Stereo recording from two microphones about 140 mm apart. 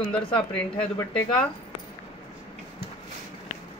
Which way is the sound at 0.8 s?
5° left (ahead or behind).